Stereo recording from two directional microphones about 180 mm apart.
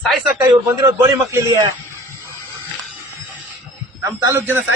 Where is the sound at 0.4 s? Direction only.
20° right (ahead or behind).